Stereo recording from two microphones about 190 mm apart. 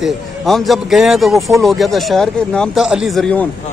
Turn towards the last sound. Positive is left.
turn(degrees=5)  # may be behind; listen again after turning